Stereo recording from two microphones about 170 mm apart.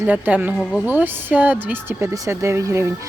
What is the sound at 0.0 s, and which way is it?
A woman's voice, 10° right (ahead or behind).